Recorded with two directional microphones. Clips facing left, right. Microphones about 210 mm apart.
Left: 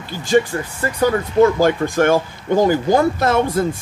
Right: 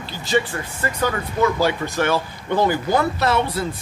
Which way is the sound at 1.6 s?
50° left (ahead or behind).